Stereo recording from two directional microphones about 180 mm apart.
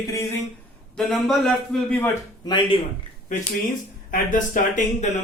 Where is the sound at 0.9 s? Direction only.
Centre (ahead or behind).